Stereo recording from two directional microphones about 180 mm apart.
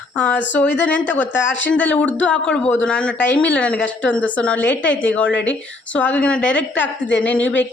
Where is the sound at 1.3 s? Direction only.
90° left.